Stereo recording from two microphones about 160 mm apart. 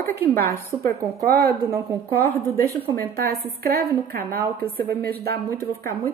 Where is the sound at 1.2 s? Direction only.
75° right (ahead or behind).